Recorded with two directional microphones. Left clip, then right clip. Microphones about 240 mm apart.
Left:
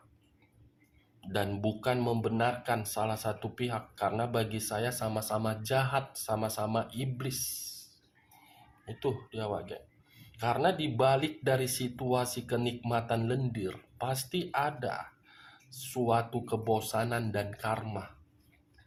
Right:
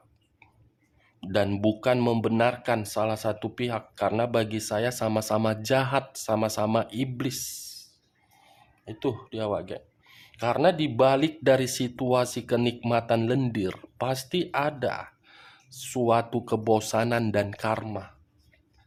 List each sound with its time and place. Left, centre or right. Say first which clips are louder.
1.2 s speech: right 8 dB; right
8.8 s speech: right 4 dB; right